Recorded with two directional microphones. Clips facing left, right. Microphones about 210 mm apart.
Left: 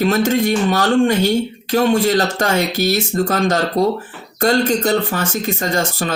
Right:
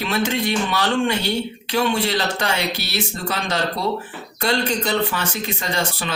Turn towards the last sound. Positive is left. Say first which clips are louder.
# left 5 dB
turn(degrees=45)  # may be behind; listen again after turning